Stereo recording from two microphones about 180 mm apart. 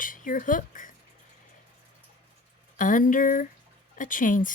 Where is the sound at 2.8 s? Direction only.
45° left (ahead or behind).